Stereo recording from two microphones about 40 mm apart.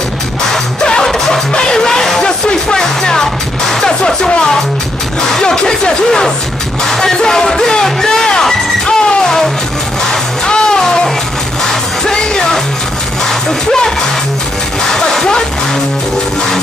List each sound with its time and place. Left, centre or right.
1.0 s music: centre
5.4 s a sound: centre
5.7 s speech: centre
7.7 s a sound: centre
8.8 s music: left
10.4 s music: left
13.7 s speech: centre
14.9 s music: centre